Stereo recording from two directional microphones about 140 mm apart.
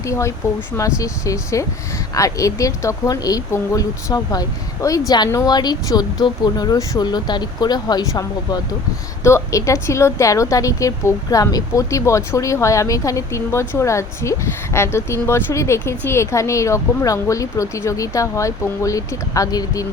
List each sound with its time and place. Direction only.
0.0 s a woman's voice: 20° left (ahead or behind)